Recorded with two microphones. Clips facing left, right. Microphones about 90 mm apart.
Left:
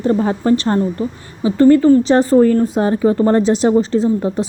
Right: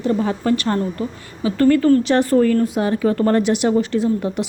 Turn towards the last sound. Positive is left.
turn(degrees=30)  # may be behind; listen again after turning